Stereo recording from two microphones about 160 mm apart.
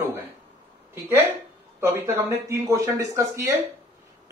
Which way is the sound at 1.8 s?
15° right (ahead or behind).